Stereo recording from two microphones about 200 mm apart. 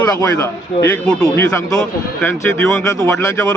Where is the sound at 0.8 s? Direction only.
10° left (ahead or behind).